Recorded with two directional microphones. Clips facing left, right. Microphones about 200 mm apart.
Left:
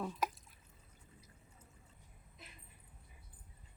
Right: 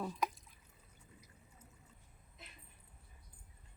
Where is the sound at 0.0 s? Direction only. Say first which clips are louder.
Even; centre (ahead or behind).